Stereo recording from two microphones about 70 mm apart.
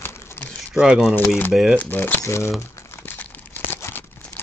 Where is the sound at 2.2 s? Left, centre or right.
Left.